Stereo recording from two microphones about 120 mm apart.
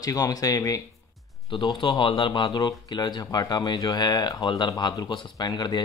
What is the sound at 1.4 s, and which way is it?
Speech, 45° left (ahead or behind).